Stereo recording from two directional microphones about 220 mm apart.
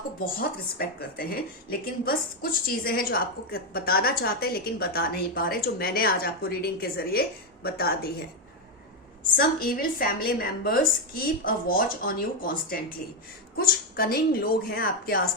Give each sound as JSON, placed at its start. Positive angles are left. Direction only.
{"t": 0.3, "sound": "a woman's voice", "side_deg": 40}
{"t": 9.3, "sound": "a woman's voice", "side_deg": 40}